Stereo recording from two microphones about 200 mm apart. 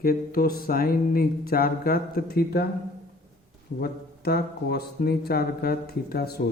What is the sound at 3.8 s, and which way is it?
Speech, 50° left (ahead or behind).